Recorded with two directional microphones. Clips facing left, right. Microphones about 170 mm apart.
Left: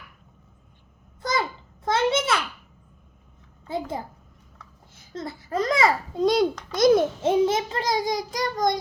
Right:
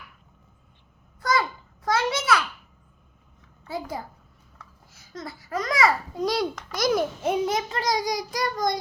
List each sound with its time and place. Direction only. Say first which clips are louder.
1.2 s a sound: right 2 dB; 20° left (ahead or behind)
3.7 s a child's voice: left 3 dB; 25° left (ahead or behind)
5.1 s a child's voice: left 4 dB; 30° left (ahead or behind)